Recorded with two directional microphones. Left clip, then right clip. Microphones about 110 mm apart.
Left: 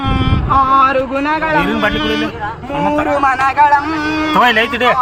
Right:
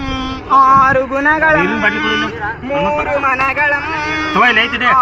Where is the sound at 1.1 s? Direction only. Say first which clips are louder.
Right 3 dB; 30° left (ahead or behind).